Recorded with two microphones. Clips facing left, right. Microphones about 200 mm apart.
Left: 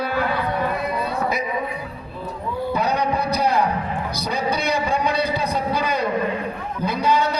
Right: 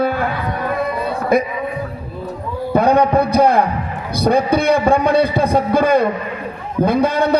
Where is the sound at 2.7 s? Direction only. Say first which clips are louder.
Right 10 dB; 50° right (ahead or behind).